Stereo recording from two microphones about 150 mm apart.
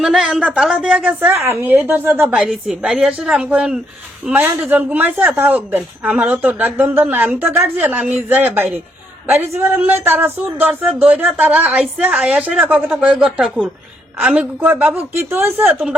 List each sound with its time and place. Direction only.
0.0 s speech: 5° right (ahead or behind)